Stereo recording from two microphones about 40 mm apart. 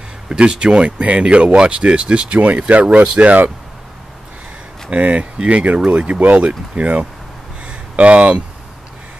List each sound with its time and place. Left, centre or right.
0.3 s speech: right
4.9 s speech: right
6.1 s speech: right
7.6 s a sound: right